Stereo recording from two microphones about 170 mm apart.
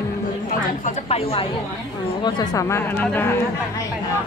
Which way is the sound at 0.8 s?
35° left (ahead or behind).